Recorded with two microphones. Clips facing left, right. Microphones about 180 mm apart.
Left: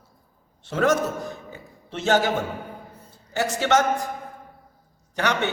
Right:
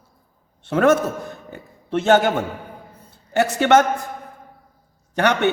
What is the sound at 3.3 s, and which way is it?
Speech, 60° right (ahead or behind).